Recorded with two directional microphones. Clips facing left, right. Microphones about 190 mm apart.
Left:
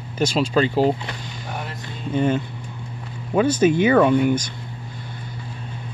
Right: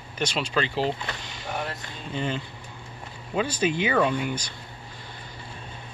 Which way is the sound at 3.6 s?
45° left (ahead or behind).